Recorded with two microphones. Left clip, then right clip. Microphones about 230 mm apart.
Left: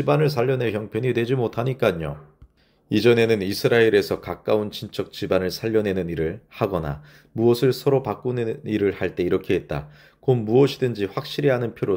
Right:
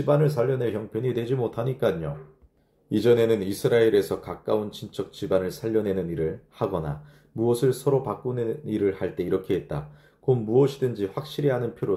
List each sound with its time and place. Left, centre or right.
0.1 s speech: left
3.1 s speech: left